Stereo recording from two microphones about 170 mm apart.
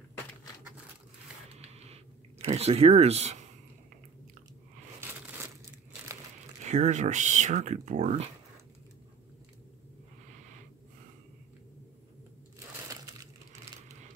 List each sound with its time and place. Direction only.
1.6 s a sound: 40° right (ahead or behind)
6.6 s speech: 45° right (ahead or behind)
12.8 s crushing: 20° right (ahead or behind)